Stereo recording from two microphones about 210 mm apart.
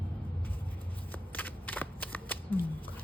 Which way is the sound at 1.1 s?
10° left (ahead or behind).